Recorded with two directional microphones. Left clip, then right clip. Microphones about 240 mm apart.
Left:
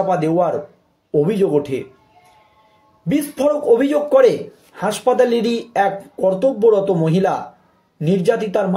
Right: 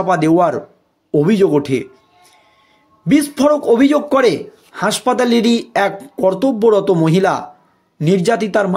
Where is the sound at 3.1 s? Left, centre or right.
Right.